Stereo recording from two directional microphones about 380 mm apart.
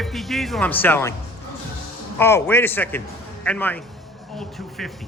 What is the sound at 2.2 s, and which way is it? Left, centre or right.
A man's voice, centre.